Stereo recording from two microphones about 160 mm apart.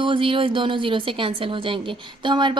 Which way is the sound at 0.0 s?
30° right (ahead or behind).